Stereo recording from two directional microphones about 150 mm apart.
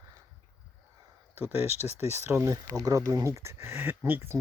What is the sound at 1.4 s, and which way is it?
Speech, 10° right (ahead or behind).